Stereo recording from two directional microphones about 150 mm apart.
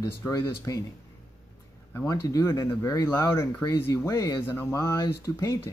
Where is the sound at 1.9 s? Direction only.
20° left (ahead or behind).